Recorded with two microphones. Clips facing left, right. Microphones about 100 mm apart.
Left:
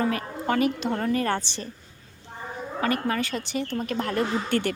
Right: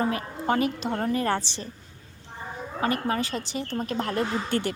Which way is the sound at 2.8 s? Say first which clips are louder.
Even; 30° right (ahead or behind).